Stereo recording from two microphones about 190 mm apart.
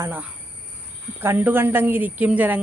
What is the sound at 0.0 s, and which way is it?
A woman's voice, 10° right (ahead or behind).